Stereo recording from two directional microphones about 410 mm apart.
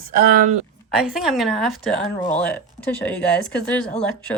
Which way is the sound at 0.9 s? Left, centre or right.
Centre.